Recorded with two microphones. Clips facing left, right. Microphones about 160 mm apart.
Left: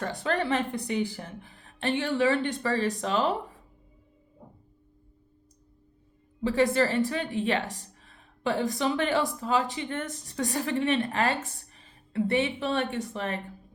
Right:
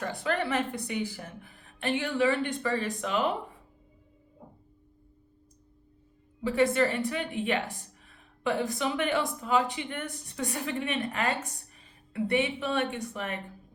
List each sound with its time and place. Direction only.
0.0 s a woman's voice: 30° left (ahead or behind)
6.6 s a woman's voice: 35° left (ahead or behind)
8.8 s a woman's voice: 35° left (ahead or behind)